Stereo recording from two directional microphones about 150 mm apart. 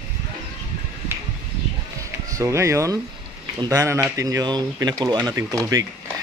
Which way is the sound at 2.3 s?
20° right (ahead or behind).